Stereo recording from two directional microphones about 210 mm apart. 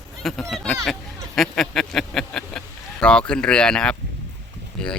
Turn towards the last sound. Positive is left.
turn(degrees=5)  # may be behind; listen again after turning